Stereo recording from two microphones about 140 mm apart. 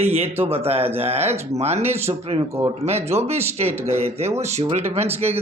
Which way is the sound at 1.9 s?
15° right (ahead or behind).